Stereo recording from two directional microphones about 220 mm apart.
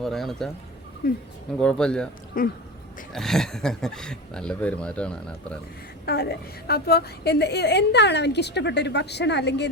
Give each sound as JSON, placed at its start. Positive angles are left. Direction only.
{"t": 0.0, "sound": "speech", "side_deg": 0}
{"t": 1.5, "sound": "speech", "side_deg": 5}
{"t": 2.3, "sound": "speech", "side_deg": 40}
{"t": 3.1, "sound": "speech", "side_deg": 0}
{"t": 6.1, "sound": "a woman's voice", "side_deg": 45}